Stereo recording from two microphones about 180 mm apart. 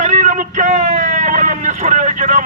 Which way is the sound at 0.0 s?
40° right (ahead or behind).